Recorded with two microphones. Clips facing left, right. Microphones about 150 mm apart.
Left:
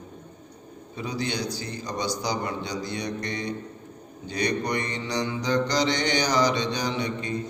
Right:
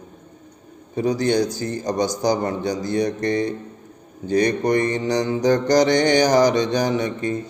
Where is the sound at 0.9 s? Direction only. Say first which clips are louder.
Right 11 dB; 45° right (ahead or behind).